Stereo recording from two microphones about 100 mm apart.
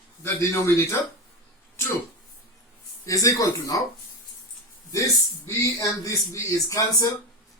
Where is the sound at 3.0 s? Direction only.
35° left (ahead or behind).